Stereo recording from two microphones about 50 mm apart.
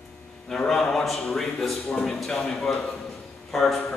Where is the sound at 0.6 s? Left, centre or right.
Centre.